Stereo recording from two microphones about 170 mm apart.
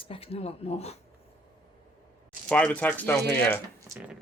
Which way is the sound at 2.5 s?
10° left (ahead or behind).